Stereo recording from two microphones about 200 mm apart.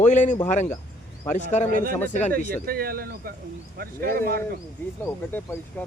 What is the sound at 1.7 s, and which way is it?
Speech, 45° right (ahead or behind).